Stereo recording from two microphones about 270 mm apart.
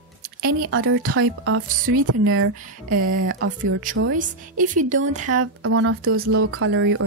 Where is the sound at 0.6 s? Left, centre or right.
Right.